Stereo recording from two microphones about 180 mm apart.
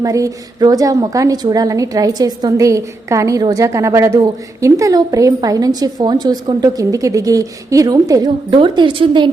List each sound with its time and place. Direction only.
0.0 s a woman's voice: 20° right (ahead or behind)